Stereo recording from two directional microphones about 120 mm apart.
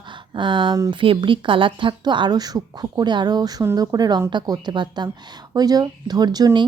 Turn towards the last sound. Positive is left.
turn(degrees=-35)  # may be behind; listen again after turning